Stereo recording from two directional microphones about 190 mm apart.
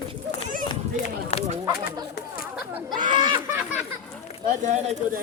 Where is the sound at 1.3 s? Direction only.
35° left (ahead or behind).